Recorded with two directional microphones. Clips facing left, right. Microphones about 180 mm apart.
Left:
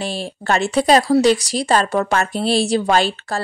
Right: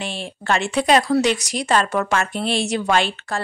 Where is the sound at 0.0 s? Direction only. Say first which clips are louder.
Left 4 dB; 35° left (ahead or behind).